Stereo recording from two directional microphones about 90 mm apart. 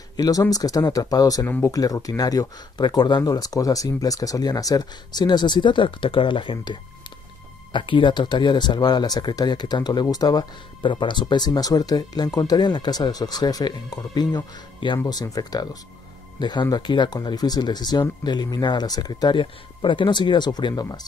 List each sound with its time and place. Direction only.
0.2 s speech: 45° left (ahead or behind)
10.8 s speech: 65° left (ahead or behind)
15.0 s speech: 45° left (ahead or behind)